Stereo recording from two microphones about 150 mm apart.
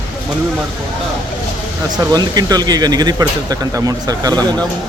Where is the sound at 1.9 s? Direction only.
25° right (ahead or behind).